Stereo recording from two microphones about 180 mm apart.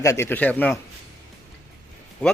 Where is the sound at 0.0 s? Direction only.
15° left (ahead or behind).